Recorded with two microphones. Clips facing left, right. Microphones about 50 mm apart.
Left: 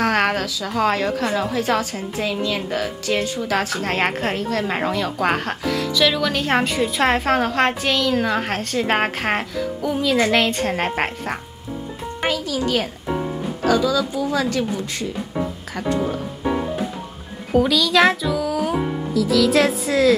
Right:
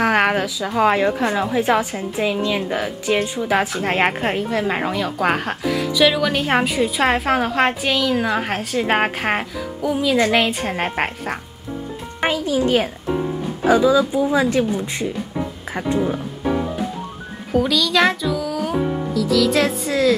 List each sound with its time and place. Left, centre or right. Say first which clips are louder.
0.0 s speech: right 2 dB; centre
12.3 s speech: right 4 dB; right
17.5 s speech: left 1 dB; centre